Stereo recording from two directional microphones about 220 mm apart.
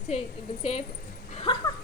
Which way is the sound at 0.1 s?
30° left (ahead or behind).